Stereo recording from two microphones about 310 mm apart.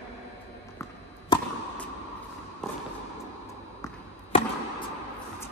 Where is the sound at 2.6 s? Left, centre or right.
Centre.